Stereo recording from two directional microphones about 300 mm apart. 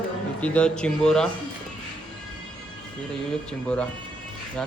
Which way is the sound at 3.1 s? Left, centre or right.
Centre.